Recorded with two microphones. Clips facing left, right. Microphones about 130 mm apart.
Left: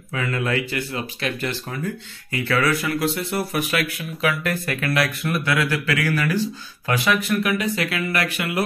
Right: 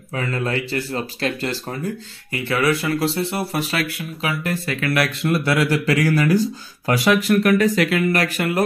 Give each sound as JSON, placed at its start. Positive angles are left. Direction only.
{"t": 0.1, "sound": "speech", "side_deg": -35}
{"t": 2.3, "sound": "speech", "side_deg": -20}